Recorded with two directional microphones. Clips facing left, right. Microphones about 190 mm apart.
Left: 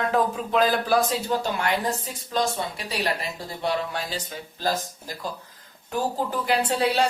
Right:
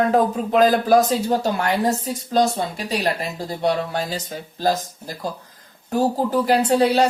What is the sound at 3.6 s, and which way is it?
A woman's voice, 40° right (ahead or behind).